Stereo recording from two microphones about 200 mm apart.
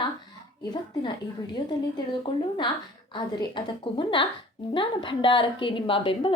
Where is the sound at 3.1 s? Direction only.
20° left (ahead or behind).